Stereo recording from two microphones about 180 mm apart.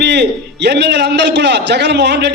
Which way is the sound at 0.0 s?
70° right (ahead or behind).